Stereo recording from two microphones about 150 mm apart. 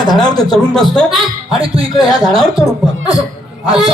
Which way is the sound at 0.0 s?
25° left (ahead or behind).